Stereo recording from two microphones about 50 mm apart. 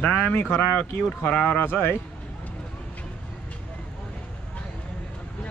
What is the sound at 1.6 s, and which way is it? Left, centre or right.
Speech, left.